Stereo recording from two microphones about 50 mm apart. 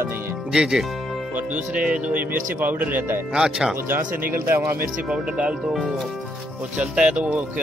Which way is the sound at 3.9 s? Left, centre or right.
Right.